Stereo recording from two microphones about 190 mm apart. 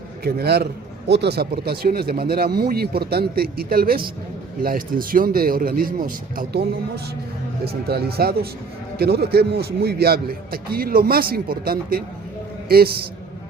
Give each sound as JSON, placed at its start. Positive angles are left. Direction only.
{"t": 0.3, "sound": "a man's voice", "side_deg": -55}